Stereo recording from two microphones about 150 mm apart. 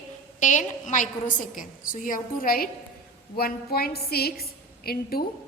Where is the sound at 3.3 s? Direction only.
90° left.